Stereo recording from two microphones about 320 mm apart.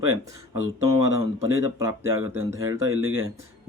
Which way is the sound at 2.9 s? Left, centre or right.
Right.